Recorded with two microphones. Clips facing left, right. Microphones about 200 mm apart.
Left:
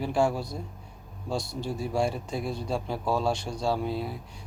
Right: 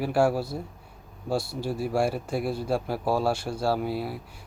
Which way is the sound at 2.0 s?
5° right (ahead or behind).